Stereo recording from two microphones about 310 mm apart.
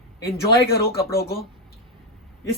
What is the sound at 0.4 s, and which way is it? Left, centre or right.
Speech, left.